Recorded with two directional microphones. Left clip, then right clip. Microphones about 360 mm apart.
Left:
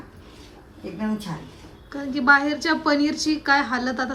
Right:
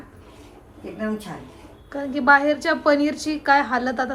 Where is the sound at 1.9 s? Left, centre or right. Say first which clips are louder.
Right 1 dB; centre.